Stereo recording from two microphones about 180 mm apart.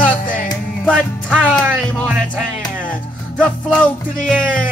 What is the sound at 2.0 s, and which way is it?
Speech, 5° right (ahead or behind).